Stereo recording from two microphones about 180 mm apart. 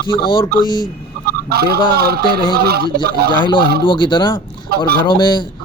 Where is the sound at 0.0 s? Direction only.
25° left (ahead or behind).